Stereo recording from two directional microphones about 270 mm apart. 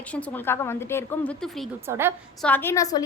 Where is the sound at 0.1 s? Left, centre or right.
Centre.